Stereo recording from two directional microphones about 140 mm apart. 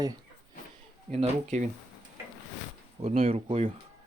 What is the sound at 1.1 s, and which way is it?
Speech, 55° right (ahead or behind).